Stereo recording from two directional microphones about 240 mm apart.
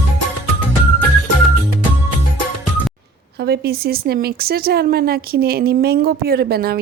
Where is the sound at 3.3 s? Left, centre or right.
Right.